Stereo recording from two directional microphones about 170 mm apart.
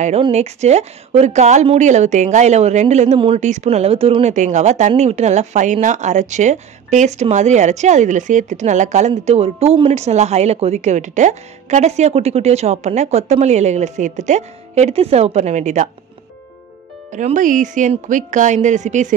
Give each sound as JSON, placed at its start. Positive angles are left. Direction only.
{"t": 0.0, "sound": "a woman's voice", "side_deg": -40}
{"t": 17.1, "sound": "speech", "side_deg": -45}